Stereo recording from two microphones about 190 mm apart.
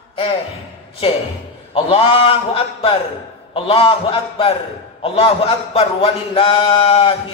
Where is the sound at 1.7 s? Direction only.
30° left (ahead or behind).